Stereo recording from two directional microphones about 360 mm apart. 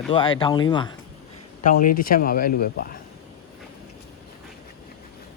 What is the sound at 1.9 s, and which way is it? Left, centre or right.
Speech, left.